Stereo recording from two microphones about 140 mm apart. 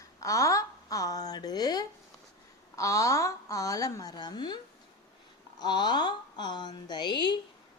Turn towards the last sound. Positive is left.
turn(degrees=35)  # may be behind; listen again after turning